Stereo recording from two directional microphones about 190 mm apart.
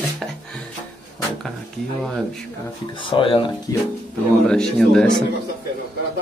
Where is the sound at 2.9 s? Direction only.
25° left (ahead or behind).